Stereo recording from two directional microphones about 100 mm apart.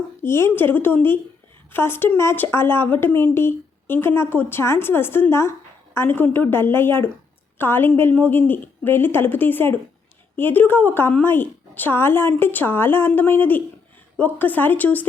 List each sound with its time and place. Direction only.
0.2 s speech: 25° left (ahead or behind)